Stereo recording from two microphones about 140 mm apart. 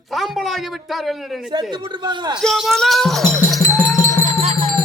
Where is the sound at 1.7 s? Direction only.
35° right (ahead or behind).